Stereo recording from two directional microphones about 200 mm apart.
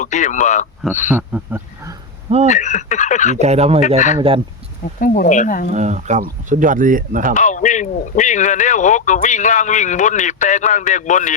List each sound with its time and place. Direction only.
0.0 s speech: 35° left (ahead or behind)
1.1 s speech: 10° right (ahead or behind)
2.5 s speech: 35° left (ahead or behind)
3.3 s speech: 35° right (ahead or behind)
3.8 s speech: 35° left (ahead or behind)
5.7 s speech: 35° right (ahead or behind)
7.3 s speech: 35° left (ahead or behind)